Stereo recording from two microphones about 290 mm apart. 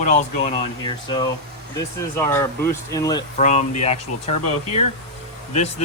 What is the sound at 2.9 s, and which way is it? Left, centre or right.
Speech, centre.